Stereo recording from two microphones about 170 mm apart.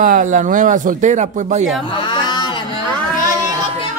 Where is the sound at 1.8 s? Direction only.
25° left (ahead or behind).